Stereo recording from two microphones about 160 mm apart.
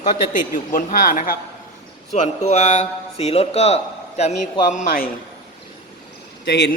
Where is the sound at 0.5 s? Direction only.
60° left (ahead or behind).